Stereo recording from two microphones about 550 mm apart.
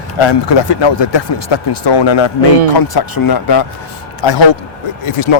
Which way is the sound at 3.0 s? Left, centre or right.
Left.